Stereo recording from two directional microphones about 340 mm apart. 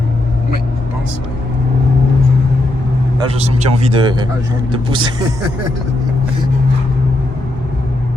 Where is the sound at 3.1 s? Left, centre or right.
Centre.